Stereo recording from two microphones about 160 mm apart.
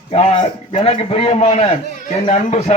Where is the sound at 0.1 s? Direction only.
40° left (ahead or behind).